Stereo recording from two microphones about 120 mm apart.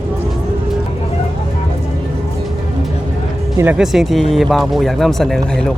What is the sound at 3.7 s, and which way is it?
Speech, centre (ahead or behind).